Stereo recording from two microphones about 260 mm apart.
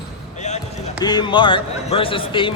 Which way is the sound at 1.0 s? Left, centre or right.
Centre.